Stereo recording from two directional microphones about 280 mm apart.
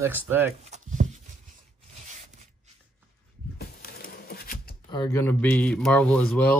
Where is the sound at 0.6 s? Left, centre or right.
Right.